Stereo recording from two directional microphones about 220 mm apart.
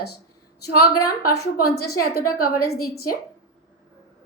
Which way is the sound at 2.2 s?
90° left.